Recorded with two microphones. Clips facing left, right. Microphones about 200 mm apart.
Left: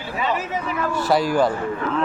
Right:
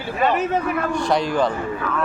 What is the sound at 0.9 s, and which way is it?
Speech, 5° left (ahead or behind).